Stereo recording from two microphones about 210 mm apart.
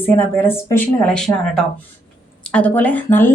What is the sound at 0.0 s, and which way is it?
A woman's voice, 10° left (ahead or behind).